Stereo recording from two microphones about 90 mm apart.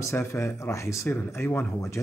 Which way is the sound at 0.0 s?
35° left (ahead or behind).